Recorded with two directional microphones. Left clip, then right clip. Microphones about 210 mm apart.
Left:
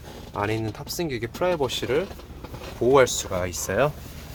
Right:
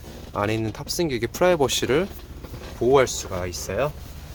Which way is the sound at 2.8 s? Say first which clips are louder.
Even; centre (ahead or behind).